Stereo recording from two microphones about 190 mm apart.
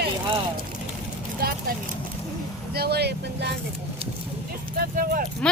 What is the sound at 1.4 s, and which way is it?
Speech, 50° right (ahead or behind).